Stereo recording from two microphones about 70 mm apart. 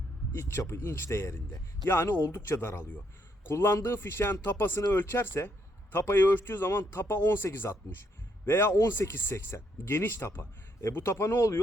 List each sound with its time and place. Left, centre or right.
0.3 s speech: left